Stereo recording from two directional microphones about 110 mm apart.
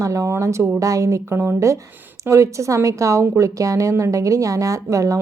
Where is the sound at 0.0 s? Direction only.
30° right (ahead or behind).